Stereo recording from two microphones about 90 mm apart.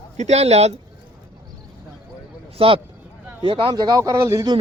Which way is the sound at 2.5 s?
90° right.